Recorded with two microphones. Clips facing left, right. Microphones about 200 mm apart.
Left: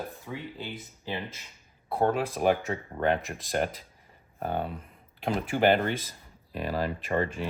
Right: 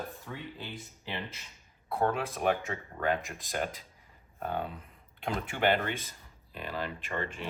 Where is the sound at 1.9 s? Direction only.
30° left (ahead or behind).